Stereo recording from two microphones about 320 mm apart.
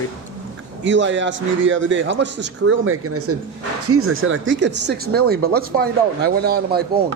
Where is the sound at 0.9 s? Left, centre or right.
Right.